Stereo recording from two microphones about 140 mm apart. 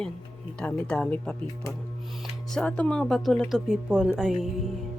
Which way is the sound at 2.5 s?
5° left (ahead or behind).